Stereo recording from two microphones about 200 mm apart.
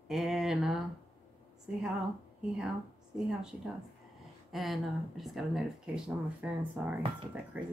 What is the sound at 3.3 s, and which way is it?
Speech, 5° right (ahead or behind).